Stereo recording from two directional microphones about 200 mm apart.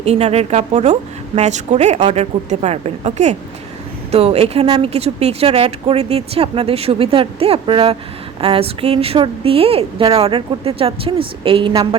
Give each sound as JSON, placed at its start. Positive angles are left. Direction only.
{"t": 0.0, "sound": "speech", "side_deg": -30}
{"t": 4.6, "sound": "a woman's voice", "side_deg": -20}
{"t": 4.9, "sound": "a woman's voice", "side_deg": -30}